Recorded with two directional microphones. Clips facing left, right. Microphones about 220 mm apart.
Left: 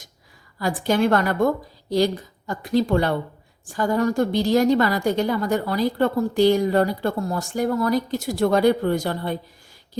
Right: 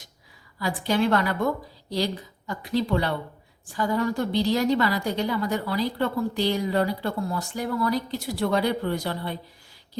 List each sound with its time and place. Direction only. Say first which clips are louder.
0.6 s a woman's voice: left 4 dB; 45° left (ahead or behind)
2.5 s a woman's voice: left 5 dB; 45° left (ahead or behind)